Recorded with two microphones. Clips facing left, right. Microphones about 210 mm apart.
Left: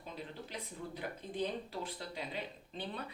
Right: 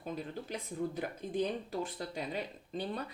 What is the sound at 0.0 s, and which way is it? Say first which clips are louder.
Speech: right 6 dB; 50° right (ahead or behind).